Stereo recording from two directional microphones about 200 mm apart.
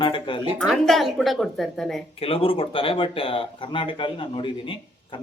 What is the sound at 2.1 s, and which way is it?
Speech, 30° left (ahead or behind).